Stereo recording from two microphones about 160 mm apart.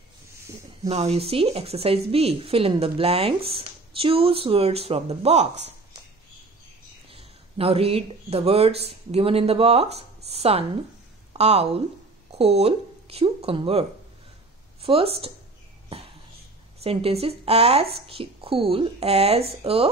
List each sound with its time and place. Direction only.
0.8 s speech: 40° right (ahead or behind)
7.1 s speech: 35° right (ahead or behind)
15.9 s a sound: 35° right (ahead or behind)
16.8 s speech: 40° right (ahead or behind)